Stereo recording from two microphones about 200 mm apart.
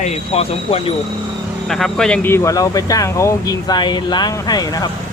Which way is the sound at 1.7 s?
Centre (ahead or behind).